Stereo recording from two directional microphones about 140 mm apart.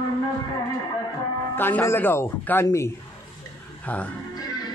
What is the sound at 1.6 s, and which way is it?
A woman's voice, 15° left (ahead or behind).